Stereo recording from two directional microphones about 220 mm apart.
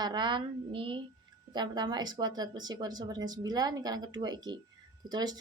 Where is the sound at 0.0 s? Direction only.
20° right (ahead or behind).